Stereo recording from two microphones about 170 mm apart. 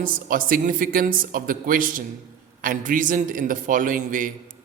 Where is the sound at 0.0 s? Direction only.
55° right (ahead or behind).